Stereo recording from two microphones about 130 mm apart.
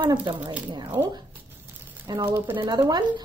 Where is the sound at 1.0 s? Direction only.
30° right (ahead or behind).